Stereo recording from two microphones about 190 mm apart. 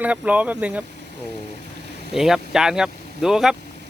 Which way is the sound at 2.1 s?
Centre (ahead or behind).